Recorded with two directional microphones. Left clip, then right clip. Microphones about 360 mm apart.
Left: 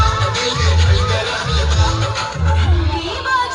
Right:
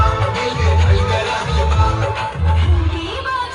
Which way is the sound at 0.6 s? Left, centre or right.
Centre.